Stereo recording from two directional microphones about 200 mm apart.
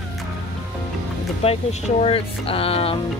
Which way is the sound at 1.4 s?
30° left (ahead or behind).